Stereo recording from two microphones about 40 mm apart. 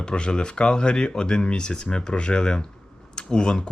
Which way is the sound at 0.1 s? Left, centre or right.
Left.